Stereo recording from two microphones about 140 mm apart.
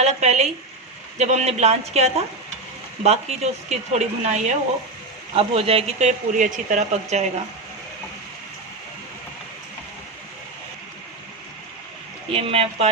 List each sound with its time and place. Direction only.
0.0 s speech: 55° right (ahead or behind)
5.3 s speech: 45° right (ahead or behind)
12.3 s speech: 45° right (ahead or behind)